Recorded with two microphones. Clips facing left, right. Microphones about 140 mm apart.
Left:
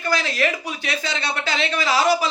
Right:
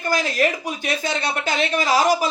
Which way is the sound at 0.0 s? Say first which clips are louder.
Right 2 dB; 45° right (ahead or behind).